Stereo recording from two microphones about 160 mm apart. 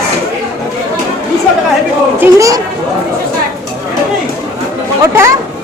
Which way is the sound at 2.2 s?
20° right (ahead or behind).